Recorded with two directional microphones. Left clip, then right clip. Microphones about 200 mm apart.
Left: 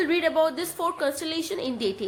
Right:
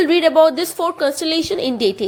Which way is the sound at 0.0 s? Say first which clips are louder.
Right 10 dB; 30° right (ahead or behind).